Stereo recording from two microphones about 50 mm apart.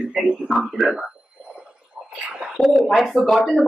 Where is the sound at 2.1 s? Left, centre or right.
Right.